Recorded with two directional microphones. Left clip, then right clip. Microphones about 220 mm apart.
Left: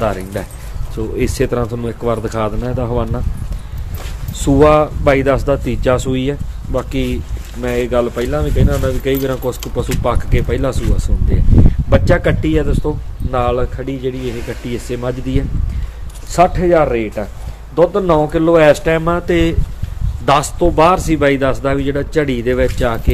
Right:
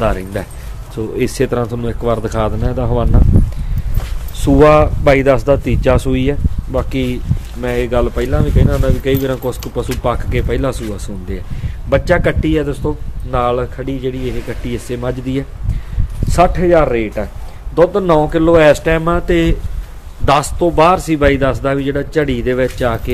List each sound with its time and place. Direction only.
0.0 s speech: 20° right (ahead or behind)
4.4 s speech: 10° right (ahead or behind)